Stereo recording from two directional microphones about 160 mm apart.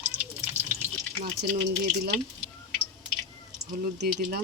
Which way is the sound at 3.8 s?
80° right.